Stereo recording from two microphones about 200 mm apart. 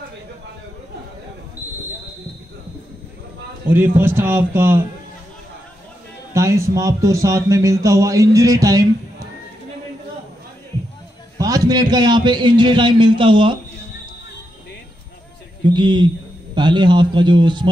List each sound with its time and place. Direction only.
3.6 s speech: 10° right (ahead or behind)
6.3 s speech: 15° right (ahead or behind)
11.3 s a man's voice: 20° right (ahead or behind)
15.6 s a man's voice: 20° right (ahead or behind)